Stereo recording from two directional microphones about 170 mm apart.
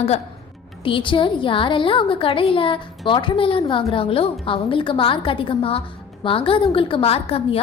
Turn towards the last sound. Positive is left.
turn(degrees=35)  # may be behind; listen again after turning